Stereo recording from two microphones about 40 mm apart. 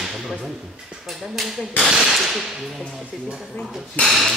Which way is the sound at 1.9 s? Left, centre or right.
Centre.